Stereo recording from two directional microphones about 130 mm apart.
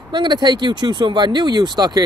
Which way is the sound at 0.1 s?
35° right (ahead or behind).